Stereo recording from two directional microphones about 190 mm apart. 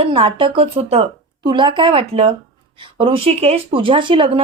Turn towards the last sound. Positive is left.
turn(degrees=-25)  # may be behind; listen again after turning